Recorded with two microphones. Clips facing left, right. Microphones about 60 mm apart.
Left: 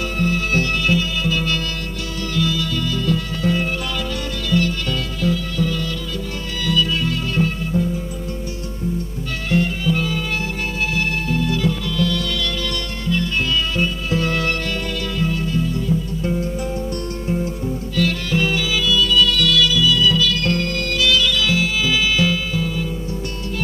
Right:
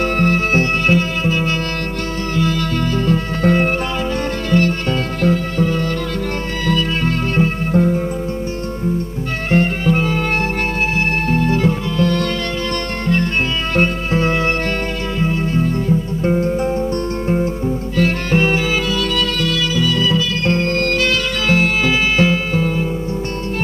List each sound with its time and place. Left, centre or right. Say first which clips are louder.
0.2 s music: right 2 dB; right
9.5 s music: right 4 dB; right
11.2 s music: right 4 dB; right
14.1 s music: right 3 dB; right